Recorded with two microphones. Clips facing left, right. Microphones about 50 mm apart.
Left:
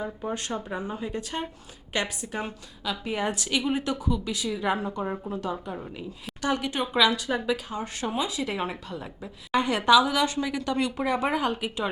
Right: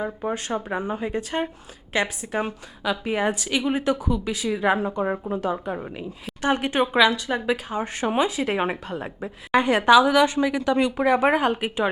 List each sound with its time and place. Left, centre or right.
0.0 s speech: right
2.9 s a woman's voice: centre; by 6.8 s right
6.8 s a woman's voice: centre
7.4 s a woman's voice: right
9.6 s speech: right
11.3 s a woman's voice: right